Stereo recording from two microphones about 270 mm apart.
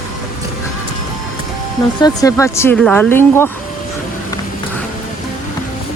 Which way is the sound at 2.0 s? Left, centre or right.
Centre.